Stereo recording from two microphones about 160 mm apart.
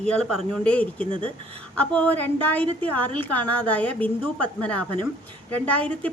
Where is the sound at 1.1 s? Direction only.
30° right (ahead or behind).